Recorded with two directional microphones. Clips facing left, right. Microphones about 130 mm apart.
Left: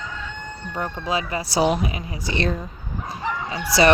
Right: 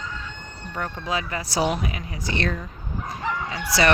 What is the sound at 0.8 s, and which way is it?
Speech, 20° left (ahead or behind).